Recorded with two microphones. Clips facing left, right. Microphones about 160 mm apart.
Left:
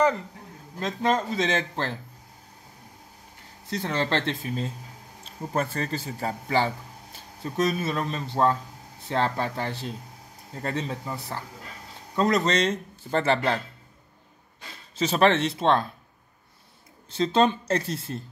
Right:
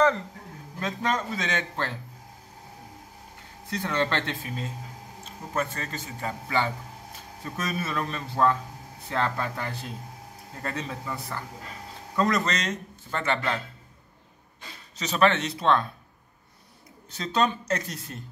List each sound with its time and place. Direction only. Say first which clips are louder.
0.7 s a man's voice: left 3 dB; 30° left (ahead or behind)
3.7 s a man's voice: left 1 dB; 30° left (ahead or behind)
15.0 s a man's voice: left 2 dB; 30° left (ahead or behind)
17.1 s a man's voice: left 4 dB; 25° left (ahead or behind)